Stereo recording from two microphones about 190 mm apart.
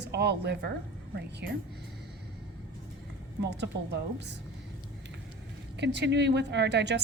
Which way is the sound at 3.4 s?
65° right (ahead or behind).